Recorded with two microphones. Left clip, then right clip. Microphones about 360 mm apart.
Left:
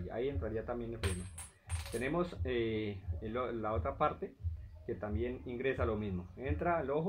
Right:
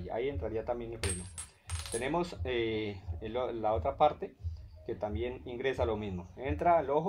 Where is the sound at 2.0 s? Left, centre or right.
Right.